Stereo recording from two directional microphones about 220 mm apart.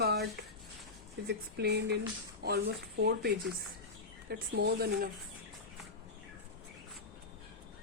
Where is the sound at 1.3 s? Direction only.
50° right (ahead or behind).